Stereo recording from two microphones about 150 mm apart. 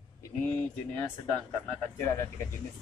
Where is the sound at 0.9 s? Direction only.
10° left (ahead or behind).